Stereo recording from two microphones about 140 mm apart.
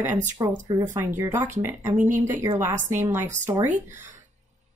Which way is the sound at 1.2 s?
15° right (ahead or behind).